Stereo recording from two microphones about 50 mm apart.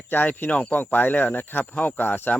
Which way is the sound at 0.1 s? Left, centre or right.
Left.